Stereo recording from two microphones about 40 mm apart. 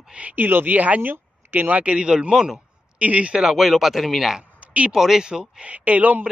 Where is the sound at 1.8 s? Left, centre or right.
Right.